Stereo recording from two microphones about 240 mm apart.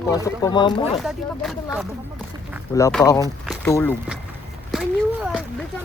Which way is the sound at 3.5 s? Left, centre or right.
Centre.